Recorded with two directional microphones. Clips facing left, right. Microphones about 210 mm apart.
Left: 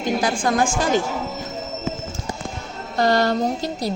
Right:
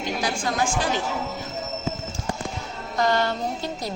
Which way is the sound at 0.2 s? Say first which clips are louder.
Left 3 dB; 50° left (ahead or behind).